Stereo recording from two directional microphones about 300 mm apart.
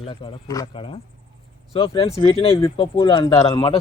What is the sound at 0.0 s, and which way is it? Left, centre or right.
Speech, centre.